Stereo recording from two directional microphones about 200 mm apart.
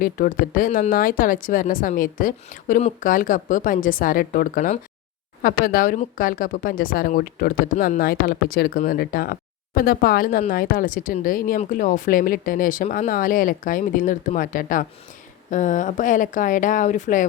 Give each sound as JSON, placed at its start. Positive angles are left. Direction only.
{"t": 0.0, "sound": "speech", "side_deg": 45}